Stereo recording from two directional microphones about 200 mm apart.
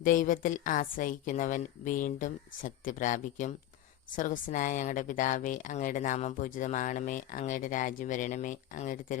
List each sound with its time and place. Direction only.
0.0 s speech: 40° left (ahead or behind)